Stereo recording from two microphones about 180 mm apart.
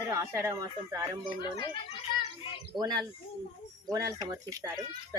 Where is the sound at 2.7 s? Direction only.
20° right (ahead or behind).